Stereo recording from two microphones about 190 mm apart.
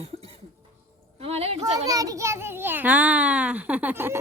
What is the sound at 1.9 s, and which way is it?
Speech, 20° right (ahead or behind).